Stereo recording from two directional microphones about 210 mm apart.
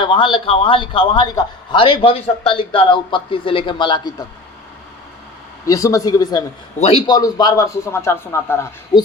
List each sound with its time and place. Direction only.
0.0 s a man's voice: 25° left (ahead or behind)
5.6 s a man's voice: 15° left (ahead or behind)